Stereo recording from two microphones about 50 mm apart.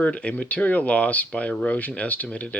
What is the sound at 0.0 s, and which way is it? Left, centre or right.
Speech, left.